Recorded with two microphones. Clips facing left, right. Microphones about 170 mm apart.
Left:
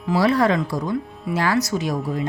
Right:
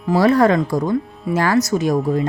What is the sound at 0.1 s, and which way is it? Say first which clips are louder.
Speech: right 4 dB; 45° right (ahead or behind).